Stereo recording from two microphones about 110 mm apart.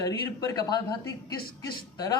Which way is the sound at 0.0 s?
35° left (ahead or behind).